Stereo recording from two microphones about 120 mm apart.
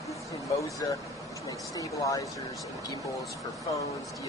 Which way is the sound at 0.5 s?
25° left (ahead or behind).